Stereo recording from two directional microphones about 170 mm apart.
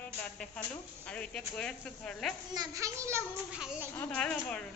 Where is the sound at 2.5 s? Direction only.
20° right (ahead or behind).